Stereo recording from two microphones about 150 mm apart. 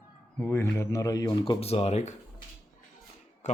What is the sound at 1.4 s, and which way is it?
Speech, 40° left (ahead or behind).